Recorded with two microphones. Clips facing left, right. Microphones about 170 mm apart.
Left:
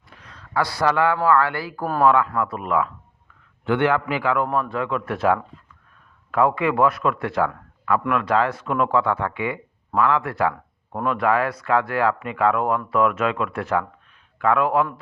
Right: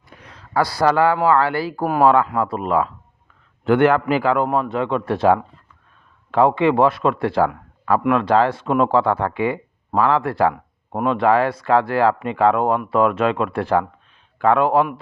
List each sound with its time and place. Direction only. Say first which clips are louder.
0.5 s speech: right 4 dB; 35° right (ahead or behind)
3.7 s a man's voice: right 5 dB; 45° right (ahead or behind)
10.5 s speech: right 4 dB; 20° right (ahead or behind)